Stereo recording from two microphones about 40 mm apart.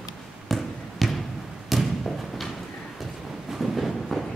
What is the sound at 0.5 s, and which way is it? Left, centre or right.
Basketball bounce, centre.